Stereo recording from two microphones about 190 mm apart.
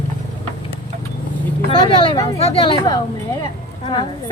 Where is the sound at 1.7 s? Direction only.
25° left (ahead or behind).